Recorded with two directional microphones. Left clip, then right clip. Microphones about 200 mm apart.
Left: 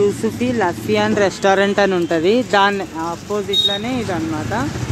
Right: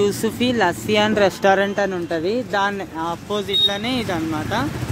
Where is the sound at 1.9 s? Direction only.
10° left (ahead or behind).